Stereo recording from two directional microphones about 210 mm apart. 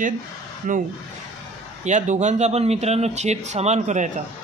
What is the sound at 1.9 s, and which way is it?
Speech, 35° right (ahead or behind).